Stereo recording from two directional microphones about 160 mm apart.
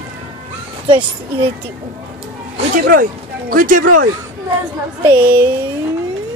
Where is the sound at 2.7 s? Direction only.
60° right (ahead or behind).